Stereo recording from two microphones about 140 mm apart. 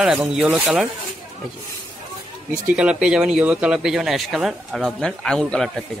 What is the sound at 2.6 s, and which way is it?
Speech, 10° right (ahead or behind).